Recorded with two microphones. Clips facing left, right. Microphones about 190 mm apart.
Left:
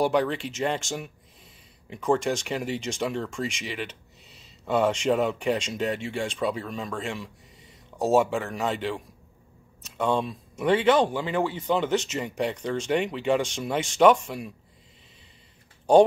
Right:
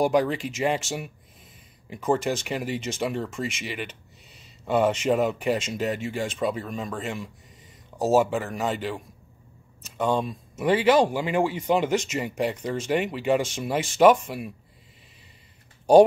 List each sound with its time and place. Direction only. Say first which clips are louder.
0.0 s speech: right 2 dB; 10° right (ahead or behind)